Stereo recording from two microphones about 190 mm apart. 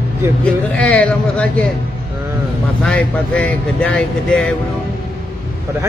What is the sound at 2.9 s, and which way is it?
Speech, 5° left (ahead or behind).